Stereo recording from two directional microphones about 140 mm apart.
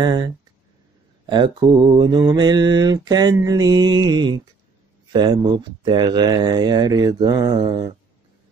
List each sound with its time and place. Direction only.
0.0 s speech: 30° right (ahead or behind)
1.2 s mantra: 35° right (ahead or behind)
3.3 s speech: 25° right (ahead or behind)